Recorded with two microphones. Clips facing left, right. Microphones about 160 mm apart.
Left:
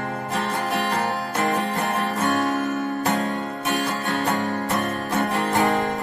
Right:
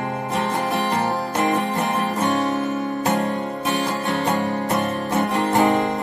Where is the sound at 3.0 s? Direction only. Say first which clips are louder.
Right 2 dB; 20° right (ahead or behind).